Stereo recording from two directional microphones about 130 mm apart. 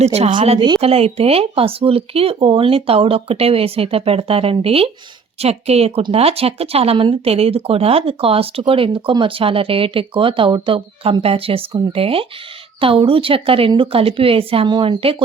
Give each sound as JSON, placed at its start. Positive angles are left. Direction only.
{"t": 0.0, "sound": "speech", "side_deg": -55}